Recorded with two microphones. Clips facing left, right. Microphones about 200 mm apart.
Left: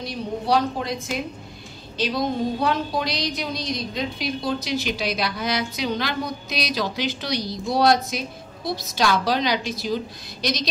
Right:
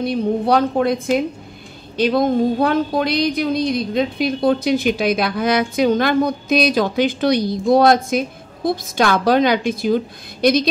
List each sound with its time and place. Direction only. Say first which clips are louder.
0.0 s a woman's voice: right 10 dB; 55° right (ahead or behind)